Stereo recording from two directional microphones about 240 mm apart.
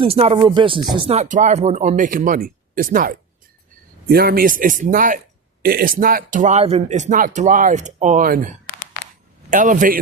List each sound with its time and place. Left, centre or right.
0.0 s speech: right
9.5 s speech: right